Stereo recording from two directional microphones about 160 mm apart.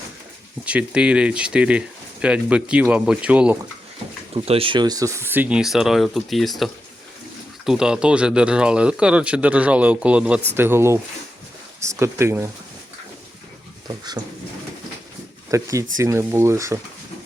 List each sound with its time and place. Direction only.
0.6 s speech: 10° right (ahead or behind)
4.4 s speech: 35° right (ahead or behind); by 12.5 s 15° right (ahead or behind)
13.8 s speech: 25° right (ahead or behind)
15.4 s speech: 20° right (ahead or behind)